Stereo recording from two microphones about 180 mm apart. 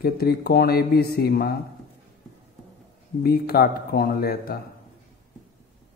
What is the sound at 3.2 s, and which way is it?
A man's voice, 55° left (ahead or behind).